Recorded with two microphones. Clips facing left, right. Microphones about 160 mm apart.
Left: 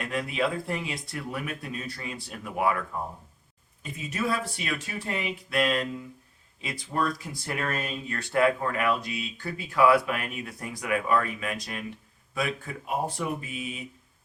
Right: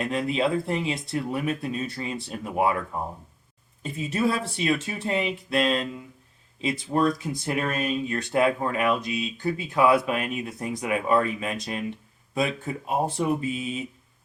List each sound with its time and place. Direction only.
0.0 s speech: 25° right (ahead or behind)
4.1 s speech: 30° right (ahead or behind)